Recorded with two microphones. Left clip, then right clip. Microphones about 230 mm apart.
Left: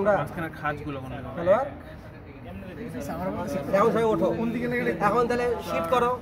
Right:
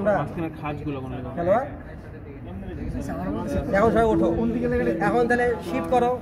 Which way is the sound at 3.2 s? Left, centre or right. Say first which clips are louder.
Right 1 dB; left.